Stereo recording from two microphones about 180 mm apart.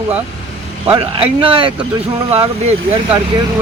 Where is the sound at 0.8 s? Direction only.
30° right (ahead or behind).